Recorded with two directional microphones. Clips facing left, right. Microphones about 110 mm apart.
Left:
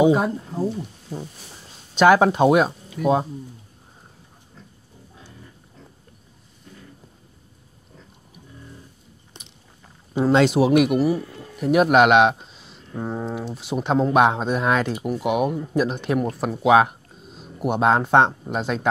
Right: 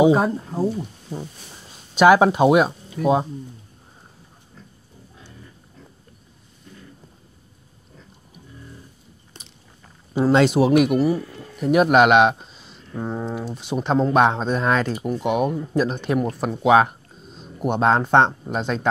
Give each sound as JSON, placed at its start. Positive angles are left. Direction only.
{"t": 0.1, "sound": "speech", "side_deg": -35}
{"t": 0.7, "sound": "speech", "side_deg": -5}
{"t": 3.0, "sound": "speech", "side_deg": -40}
{"t": 10.1, "sound": "speech", "side_deg": 0}